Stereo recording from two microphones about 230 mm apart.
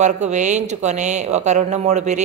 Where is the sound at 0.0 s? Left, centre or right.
Right.